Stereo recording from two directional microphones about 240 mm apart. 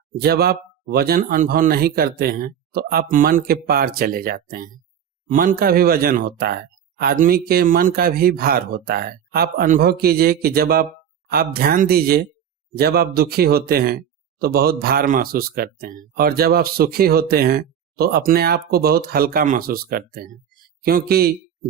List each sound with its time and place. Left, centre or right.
0.2 s speech: right